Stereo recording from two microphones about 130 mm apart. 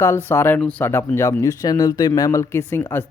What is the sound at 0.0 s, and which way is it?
Speech, 20° left (ahead or behind).